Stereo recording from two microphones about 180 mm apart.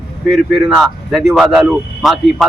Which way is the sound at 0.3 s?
Centre (ahead or behind).